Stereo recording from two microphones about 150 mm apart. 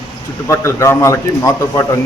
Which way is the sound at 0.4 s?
20° left (ahead or behind).